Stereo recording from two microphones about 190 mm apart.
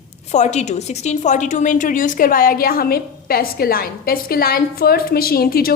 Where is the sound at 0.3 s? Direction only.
35° left (ahead or behind).